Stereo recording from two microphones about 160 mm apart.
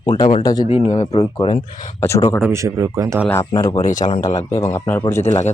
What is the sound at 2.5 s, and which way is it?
Speech, 20° right (ahead or behind).